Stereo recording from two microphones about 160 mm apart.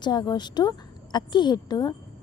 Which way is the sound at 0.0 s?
25° left (ahead or behind).